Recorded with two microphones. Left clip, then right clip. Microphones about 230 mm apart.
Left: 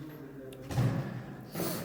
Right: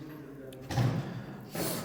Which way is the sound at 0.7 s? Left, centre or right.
Centre.